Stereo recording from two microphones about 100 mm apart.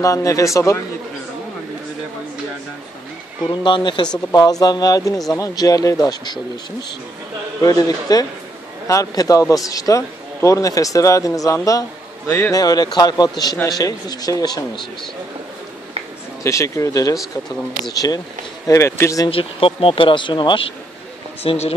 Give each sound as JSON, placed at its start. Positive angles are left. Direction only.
{"t": 0.0, "sound": "a man's voice", "side_deg": 35}
{"t": 3.4, "sound": "speech", "side_deg": 50}
{"t": 4.3, "sound": "a man's voice", "side_deg": 40}
{"t": 7.6, "sound": "a man's voice", "side_deg": 40}
{"t": 16.4, "sound": "a man's voice", "side_deg": 30}
{"t": 18.7, "sound": "speech", "side_deg": 30}
{"t": 19.3, "sound": "speech", "side_deg": 65}
{"t": 21.4, "sound": "speech", "side_deg": 80}